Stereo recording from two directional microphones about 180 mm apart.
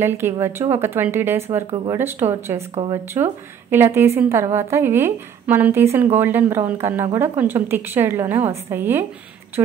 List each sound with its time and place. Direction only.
0.0 s a woman's voice: 15° right (ahead or behind)